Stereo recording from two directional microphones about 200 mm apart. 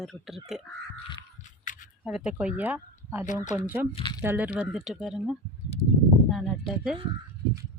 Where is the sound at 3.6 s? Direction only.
10° right (ahead or behind).